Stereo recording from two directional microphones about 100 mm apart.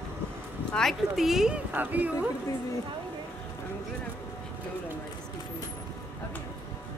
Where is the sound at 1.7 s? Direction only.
15° right (ahead or behind).